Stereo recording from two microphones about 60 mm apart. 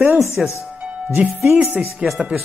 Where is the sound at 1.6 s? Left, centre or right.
Right.